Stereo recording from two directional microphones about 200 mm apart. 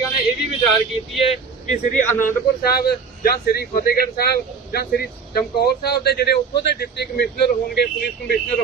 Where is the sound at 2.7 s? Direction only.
50° left (ahead or behind).